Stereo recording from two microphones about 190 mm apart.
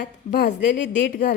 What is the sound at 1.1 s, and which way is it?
Speech, 50° left (ahead or behind).